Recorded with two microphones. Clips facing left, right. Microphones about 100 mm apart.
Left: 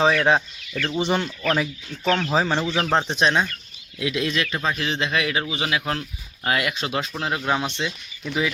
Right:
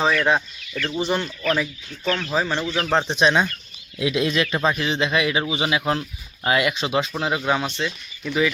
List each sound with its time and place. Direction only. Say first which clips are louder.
0.0 s speech: left 1 dB; 20° left (ahead or behind)
1.1 s speech: even; 10° left (ahead or behind)
2.3 s speech: left 2 dB; 25° left (ahead or behind)
2.7 s speech: right 3 dB; 5° left (ahead or behind)
3.2 s a man's voice: right 4 dB; 5° right (ahead or behind)
3.9 s speech: right 3 dB; 20° right (ahead or behind)
4.7 s a man's voice: right 2 dB; 5° right (ahead or behind)